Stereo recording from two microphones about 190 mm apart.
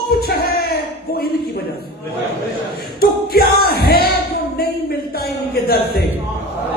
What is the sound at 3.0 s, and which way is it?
Music, 55° left (ahead or behind).